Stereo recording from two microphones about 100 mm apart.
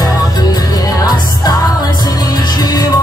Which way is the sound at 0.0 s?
40° left (ahead or behind).